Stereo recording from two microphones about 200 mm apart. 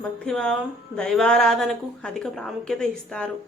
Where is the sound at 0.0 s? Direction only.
5° left (ahead or behind).